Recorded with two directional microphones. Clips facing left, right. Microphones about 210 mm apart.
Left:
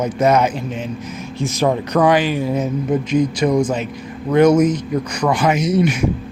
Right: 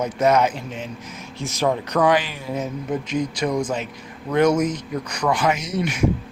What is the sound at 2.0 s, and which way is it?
Speech, 10° left (ahead or behind).